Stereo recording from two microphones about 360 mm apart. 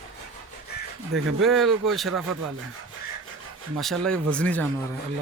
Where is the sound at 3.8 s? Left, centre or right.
Centre.